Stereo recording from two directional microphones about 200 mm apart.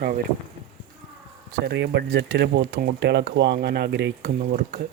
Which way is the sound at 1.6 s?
60° right (ahead or behind).